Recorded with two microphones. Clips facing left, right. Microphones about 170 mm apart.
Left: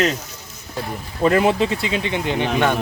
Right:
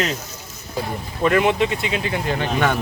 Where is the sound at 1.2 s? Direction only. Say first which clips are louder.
Left 1 dB; 30° left (ahead or behind); by 2.7 s 15° left (ahead or behind).